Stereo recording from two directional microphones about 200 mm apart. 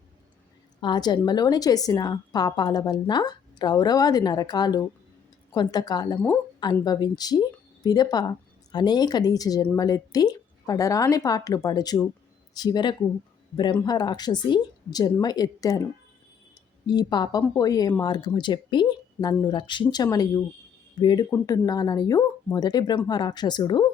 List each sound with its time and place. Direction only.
0.8 s a woman's voice: 20° left (ahead or behind)
16.8 s a woman's voice: 20° left (ahead or behind)